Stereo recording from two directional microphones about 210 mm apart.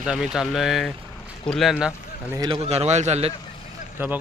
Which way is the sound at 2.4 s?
20° right (ahead or behind).